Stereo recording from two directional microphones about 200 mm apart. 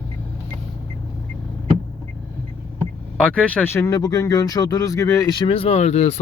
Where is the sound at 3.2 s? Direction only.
5° left (ahead or behind); by 6.1 s 35° left (ahead or behind).